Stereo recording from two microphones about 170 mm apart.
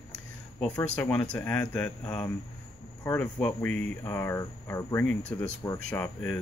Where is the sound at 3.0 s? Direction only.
10° left (ahead or behind).